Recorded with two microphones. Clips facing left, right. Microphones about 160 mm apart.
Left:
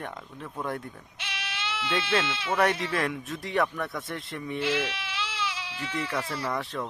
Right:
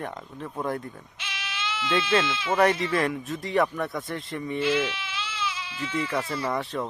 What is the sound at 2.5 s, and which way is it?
Speech, centre (ahead or behind).